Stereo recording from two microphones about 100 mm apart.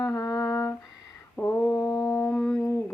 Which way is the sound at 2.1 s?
25° left (ahead or behind).